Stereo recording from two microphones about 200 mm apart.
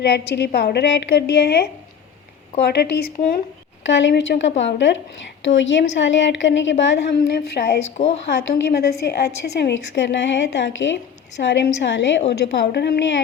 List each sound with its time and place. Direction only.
0.0 s a woman's voice: 55° left (ahead or behind)
3.8 s a woman's voice: 65° left (ahead or behind)
7.2 s a woman's voice: 50° left (ahead or behind)
7.9 s speech: 30° left (ahead or behind)
8.4 s a woman's voice: 55° left (ahead or behind)